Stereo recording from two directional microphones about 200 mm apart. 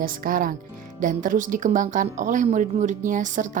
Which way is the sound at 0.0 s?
45° right (ahead or behind).